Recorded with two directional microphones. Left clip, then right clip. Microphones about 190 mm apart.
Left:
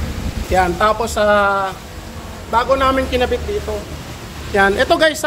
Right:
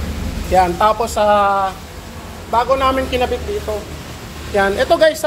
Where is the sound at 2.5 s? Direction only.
10° left (ahead or behind).